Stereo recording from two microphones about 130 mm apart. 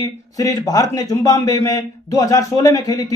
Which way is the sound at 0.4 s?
30° left (ahead or behind).